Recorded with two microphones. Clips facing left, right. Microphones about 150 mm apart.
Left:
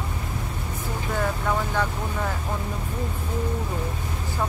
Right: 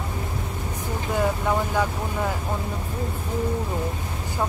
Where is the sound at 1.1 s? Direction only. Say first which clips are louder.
Right 3 dB; 15° right (ahead or behind).